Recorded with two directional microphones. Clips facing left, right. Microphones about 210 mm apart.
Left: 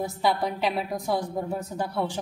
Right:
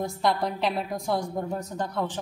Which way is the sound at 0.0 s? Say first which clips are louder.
Even; 5° left (ahead or behind).